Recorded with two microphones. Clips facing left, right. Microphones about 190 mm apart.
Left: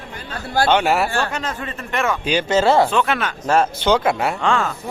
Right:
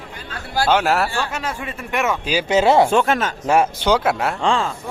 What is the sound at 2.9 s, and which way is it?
Speech, 45° right (ahead or behind).